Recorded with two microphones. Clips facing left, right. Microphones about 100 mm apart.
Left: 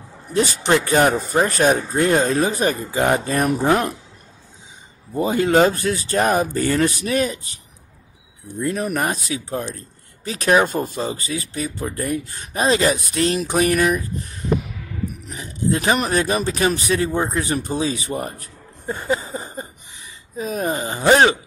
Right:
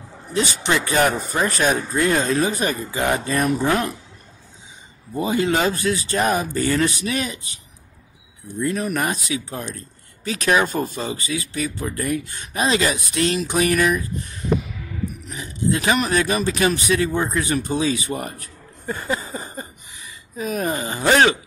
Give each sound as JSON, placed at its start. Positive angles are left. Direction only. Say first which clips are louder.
{"t": 0.3, "sound": "speech", "louder": "left 3 dB", "side_deg": 45}
{"t": 5.2, "sound": "speech", "louder": "left 4 dB", "side_deg": 45}
{"t": 15.3, "sound": "speech", "louder": "left 1 dB", "side_deg": 40}
{"t": 18.9, "sound": "a sound", "louder": "left 3 dB", "side_deg": 25}
{"t": 20.3, "sound": "speech", "louder": "left 1 dB", "side_deg": 30}